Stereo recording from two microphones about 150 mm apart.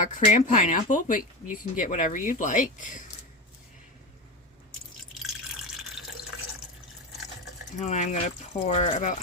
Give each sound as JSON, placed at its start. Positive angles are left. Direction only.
{"t": 0.0, "sound": "speech", "side_deg": 55}
{"t": 5.2, "sound": "drip", "side_deg": -5}
{"t": 7.8, "sound": "speech", "side_deg": 50}